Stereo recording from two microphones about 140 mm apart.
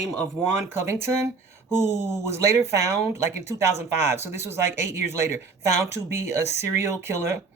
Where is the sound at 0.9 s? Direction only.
20° right (ahead or behind).